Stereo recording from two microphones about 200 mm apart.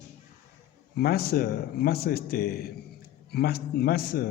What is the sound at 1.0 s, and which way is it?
A man's voice, 50° left (ahead or behind).